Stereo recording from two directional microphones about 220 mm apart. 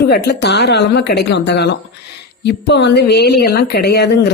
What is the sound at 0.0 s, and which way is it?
Speech, 45° left (ahead or behind).